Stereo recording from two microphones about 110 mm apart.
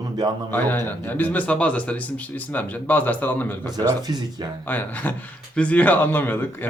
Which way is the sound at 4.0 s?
35° right (ahead or behind).